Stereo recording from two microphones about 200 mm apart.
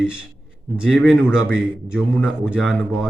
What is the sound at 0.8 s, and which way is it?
Speech, 5° right (ahead or behind).